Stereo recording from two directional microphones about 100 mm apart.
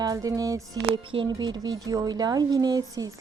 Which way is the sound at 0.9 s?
55° right (ahead or behind).